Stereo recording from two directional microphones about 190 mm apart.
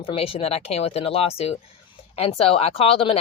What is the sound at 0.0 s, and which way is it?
Speech, 30° left (ahead or behind).